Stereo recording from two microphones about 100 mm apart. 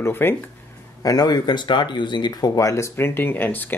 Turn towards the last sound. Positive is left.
turn(degrees=20)  # may be behind; listen again after turning